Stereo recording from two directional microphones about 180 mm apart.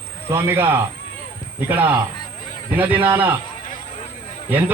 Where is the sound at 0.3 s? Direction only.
10° right (ahead or behind).